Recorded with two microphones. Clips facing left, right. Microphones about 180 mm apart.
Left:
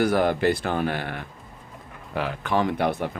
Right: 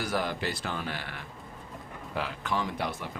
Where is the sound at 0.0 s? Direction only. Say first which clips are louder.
Left 10 dB; 55° left (ahead or behind).